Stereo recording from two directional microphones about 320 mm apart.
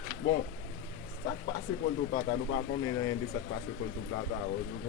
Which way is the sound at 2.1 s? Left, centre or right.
Left.